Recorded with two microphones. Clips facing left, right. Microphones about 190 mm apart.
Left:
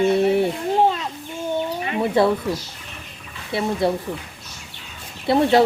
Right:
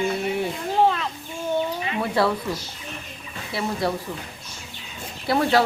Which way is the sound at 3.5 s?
25° left (ahead or behind).